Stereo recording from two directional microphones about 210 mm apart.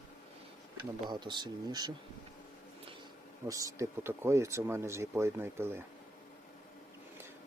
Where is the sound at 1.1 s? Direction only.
20° right (ahead or behind).